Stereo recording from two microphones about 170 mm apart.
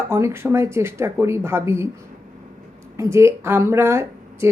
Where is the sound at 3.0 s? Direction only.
15° right (ahead or behind).